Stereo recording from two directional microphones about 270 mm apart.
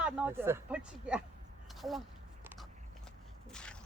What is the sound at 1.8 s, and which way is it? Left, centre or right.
Speech, centre.